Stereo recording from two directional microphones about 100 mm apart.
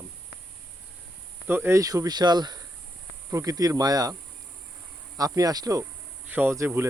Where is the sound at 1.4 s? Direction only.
20° right (ahead or behind).